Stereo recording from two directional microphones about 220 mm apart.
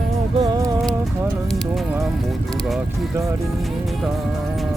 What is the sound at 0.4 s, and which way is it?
Music, 15° right (ahead or behind).